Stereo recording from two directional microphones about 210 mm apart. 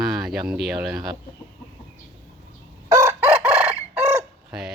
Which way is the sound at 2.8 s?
15° right (ahead or behind).